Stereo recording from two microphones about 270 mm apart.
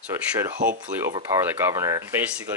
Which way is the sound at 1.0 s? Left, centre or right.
Centre.